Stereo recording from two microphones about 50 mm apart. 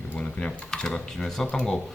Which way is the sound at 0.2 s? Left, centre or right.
Left.